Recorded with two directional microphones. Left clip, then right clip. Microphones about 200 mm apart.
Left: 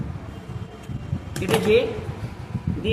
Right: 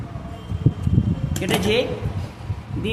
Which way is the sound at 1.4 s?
45° right (ahead or behind).